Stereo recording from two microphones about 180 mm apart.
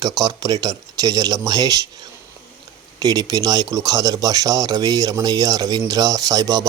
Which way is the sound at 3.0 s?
20° right (ahead or behind).